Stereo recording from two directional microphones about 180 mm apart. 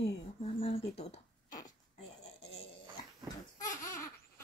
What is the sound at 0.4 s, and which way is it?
Speech, 30° left (ahead or behind).